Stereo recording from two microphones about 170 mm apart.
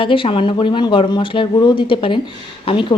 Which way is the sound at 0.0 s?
30° left (ahead or behind).